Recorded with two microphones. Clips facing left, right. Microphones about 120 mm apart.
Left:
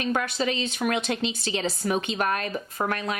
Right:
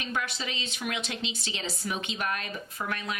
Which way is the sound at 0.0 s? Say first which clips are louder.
Left 8 dB; 50° left (ahead or behind).